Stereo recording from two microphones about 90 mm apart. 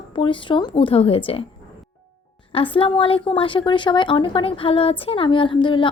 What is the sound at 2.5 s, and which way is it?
Speech, 85° left.